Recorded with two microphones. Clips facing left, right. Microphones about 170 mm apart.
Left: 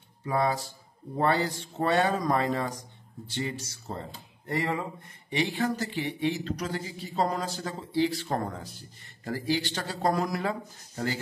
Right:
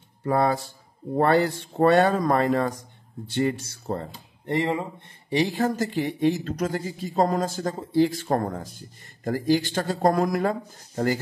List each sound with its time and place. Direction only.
0.2 s speech: 55° right (ahead or behind)
4.5 s speech: 25° right (ahead or behind)
5.3 s speech: 40° right (ahead or behind)